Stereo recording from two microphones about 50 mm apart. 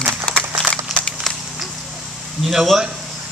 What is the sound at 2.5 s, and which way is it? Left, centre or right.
Speech, centre.